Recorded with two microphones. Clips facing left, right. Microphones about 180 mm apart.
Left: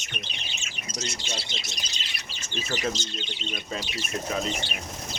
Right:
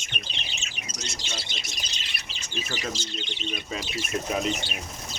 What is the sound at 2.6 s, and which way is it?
Speech, 10° right (ahead or behind).